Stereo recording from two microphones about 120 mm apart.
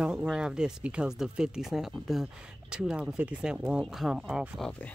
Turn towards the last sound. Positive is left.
turn(degrees=0)  # may be behind; listen again after turning